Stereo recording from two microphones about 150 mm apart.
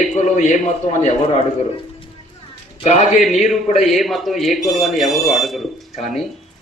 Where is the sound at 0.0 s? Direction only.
50° left (ahead or behind).